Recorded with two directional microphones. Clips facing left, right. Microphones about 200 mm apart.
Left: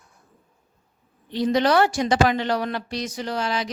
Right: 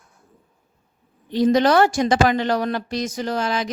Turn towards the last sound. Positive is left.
turn(degrees=-50)  # may be behind; listen again after turning